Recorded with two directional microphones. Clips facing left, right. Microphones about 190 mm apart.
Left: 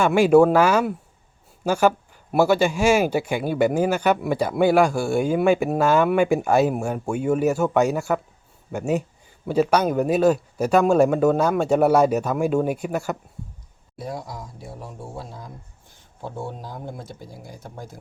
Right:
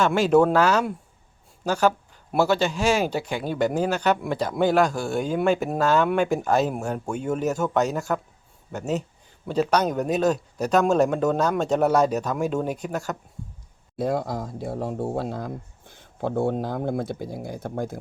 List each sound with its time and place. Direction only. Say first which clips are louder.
0.0 s speech: left 3 dB; 10° left (ahead or behind)
14.0 s speech: right 7 dB; 60° right (ahead or behind)